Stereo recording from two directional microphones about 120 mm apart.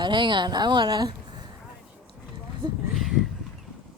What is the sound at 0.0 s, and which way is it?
A woman's voice, 40° right (ahead or behind).